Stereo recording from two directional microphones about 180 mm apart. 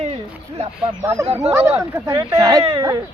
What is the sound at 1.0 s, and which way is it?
Speech, 15° right (ahead or behind).